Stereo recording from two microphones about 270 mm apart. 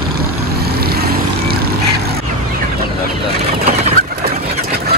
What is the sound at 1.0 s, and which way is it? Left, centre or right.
Vehicle, right.